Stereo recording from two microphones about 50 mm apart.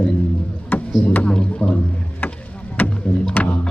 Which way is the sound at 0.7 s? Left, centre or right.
Left.